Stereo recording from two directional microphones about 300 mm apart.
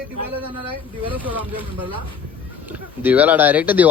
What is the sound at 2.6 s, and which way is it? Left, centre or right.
Speech, centre.